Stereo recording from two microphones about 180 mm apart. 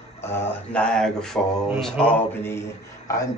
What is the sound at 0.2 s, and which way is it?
Speech, 10° left (ahead or behind).